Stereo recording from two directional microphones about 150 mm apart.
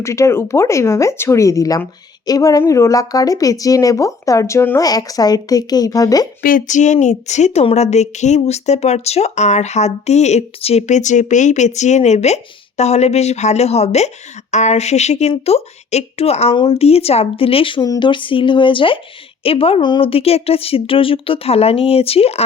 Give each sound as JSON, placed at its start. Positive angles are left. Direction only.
{"t": 0.0, "sound": "a woman's voice", "side_deg": 20}
{"t": 6.4, "sound": "speech", "side_deg": 65}